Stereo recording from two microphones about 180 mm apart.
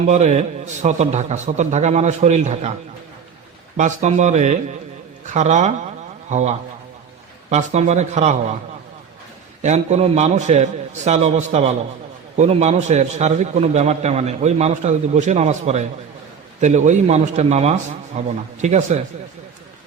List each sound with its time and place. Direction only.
0.1 s a man's voice: 40° right (ahead or behind)
3.8 s a man's voice: 40° right (ahead or behind)
9.6 s a man's voice: 40° right (ahead or behind)